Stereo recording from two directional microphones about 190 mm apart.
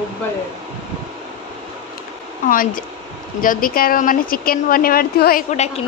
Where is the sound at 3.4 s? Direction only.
45° left (ahead or behind).